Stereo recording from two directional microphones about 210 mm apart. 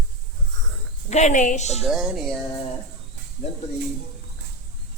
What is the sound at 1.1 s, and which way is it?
Speech, 35° left (ahead or behind).